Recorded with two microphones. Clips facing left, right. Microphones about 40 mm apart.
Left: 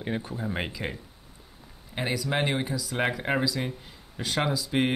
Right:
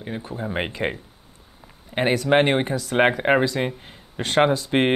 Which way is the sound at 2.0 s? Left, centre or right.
Right.